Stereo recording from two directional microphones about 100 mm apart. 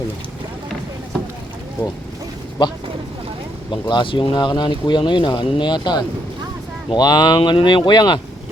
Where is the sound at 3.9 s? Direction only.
55° left (ahead or behind).